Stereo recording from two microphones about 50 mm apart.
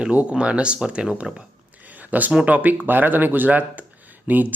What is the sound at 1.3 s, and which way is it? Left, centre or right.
Speech, centre.